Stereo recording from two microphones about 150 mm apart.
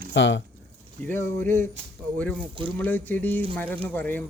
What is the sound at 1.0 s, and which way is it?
Speech, 10° left (ahead or behind).